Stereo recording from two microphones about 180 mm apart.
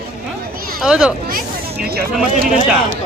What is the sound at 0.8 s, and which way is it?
Speech, 5° right (ahead or behind).